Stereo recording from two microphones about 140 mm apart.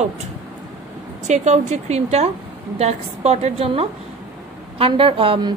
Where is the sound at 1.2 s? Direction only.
55° right (ahead or behind).